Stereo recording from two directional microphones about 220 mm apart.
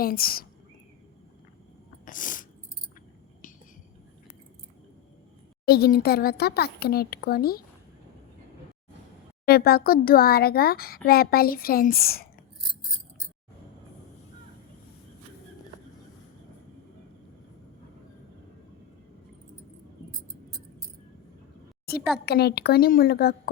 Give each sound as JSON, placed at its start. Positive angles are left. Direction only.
{"t": 0.0, "sound": "a child's voice", "side_deg": 40}
{"t": 2.0, "sound": "a sound", "side_deg": 35}
{"t": 5.6, "sound": "a child's voice", "side_deg": 45}
{"t": 9.5, "sound": "a child's voice", "side_deg": 45}
{"t": 22.3, "sound": "a child's voice", "side_deg": 45}